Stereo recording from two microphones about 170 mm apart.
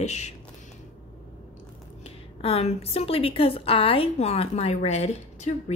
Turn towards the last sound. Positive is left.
turn(degrees=40)  # may be behind; listen again after turning